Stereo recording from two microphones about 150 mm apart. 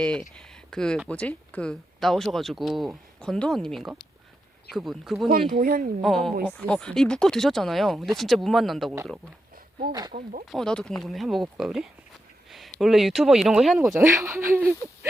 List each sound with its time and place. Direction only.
0.0 s speech: 5° left (ahead or behind)
5.5 s speech: 75° right (ahead or behind)
6.0 s speech: centre (ahead or behind)
10.1 s speech: 70° right (ahead or behind)
10.4 s speech: centre (ahead or behind)
13.7 s speech: 20° right (ahead or behind)